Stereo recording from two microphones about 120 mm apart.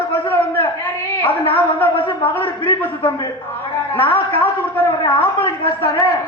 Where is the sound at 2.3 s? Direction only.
15° left (ahead or behind).